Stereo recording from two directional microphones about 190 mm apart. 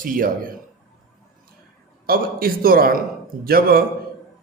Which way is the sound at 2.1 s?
50° right (ahead or behind).